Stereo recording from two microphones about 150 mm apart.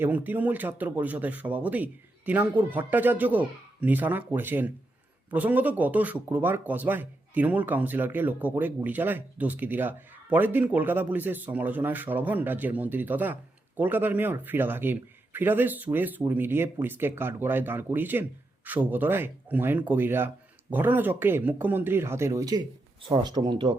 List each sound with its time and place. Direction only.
0.0 s speech: 10° right (ahead or behind); by 23.7 s 30° right (ahead or behind)